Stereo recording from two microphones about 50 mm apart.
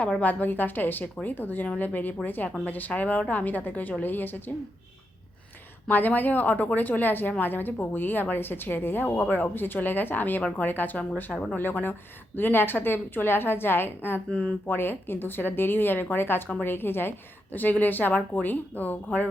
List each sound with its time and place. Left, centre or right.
0.2 s a woman's voice: left
5.9 s a woman's voice: left
14.3 s speech: left
14.7 s a woman's voice: left